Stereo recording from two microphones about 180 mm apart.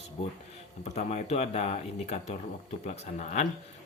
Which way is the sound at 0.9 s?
40° left (ahead or behind).